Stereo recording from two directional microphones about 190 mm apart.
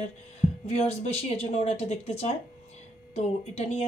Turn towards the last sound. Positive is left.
turn(degrees=35)  # may be behind; listen again after turning